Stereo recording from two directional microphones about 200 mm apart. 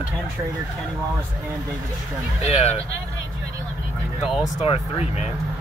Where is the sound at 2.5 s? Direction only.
30° left (ahead or behind).